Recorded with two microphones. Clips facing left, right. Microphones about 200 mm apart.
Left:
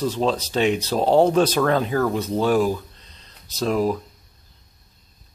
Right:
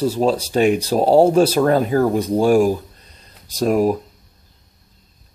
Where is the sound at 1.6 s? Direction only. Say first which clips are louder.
Right 5 dB; 40° right (ahead or behind).